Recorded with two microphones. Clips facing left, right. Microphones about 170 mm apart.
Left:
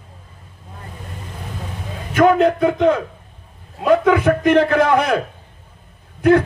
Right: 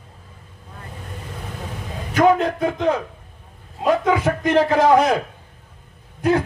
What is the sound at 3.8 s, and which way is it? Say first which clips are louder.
A man's voice: left 4 dB; 60° left (ahead or behind).